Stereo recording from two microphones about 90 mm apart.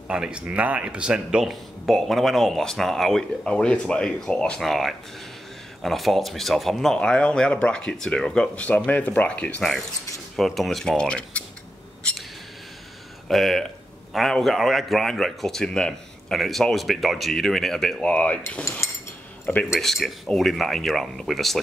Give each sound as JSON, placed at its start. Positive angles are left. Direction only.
{"t": 0.1, "sound": "speech", "side_deg": -10}
{"t": 9.6, "sound": "speech", "side_deg": 5}
{"t": 13.3, "sound": "speech", "side_deg": 0}
{"t": 18.6, "sound": "speech", "side_deg": 30}
{"t": 19.7, "sound": "speech", "side_deg": 0}